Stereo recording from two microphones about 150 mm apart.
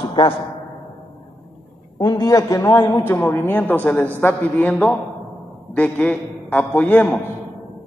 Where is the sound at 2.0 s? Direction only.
25° left (ahead or behind).